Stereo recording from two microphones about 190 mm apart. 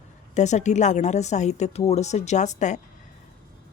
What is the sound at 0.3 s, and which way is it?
Speech, 40° left (ahead or behind).